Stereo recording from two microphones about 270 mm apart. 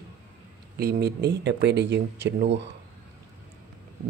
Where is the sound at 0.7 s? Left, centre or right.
Right.